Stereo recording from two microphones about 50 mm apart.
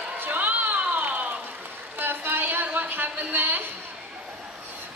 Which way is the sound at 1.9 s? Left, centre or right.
Right.